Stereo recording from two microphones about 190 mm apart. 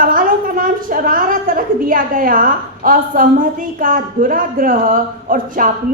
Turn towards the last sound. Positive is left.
turn(degrees=-45)  # may be behind; listen again after turning